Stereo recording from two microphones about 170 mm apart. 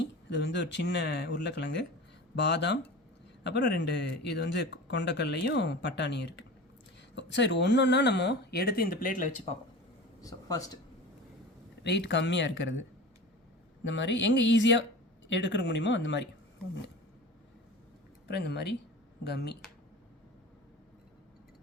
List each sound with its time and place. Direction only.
0.0 s speech: 90° left; by 9.5 s 50° left (ahead or behind)
10.2 s speech: 20° left (ahead or behind)
11.8 s speech: 85° left
13.8 s speech: 90° left
18.3 s speech: 75° left (ahead or behind)